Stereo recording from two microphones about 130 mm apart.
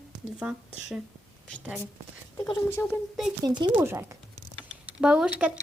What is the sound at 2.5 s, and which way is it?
Speech, 20° left (ahead or behind).